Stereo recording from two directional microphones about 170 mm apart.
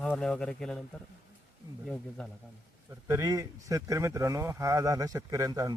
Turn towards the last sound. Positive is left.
turn(degrees=-20)  # may be behind; listen again after turning